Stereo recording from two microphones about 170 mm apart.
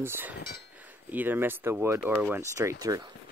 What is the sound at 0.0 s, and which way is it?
Speech, 10° right (ahead or behind).